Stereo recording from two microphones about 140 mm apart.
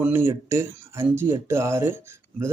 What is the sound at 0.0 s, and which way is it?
Speech, 15° right (ahead or behind).